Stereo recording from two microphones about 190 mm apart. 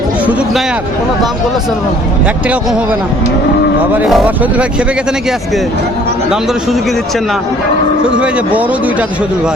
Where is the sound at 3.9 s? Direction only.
Centre (ahead or behind).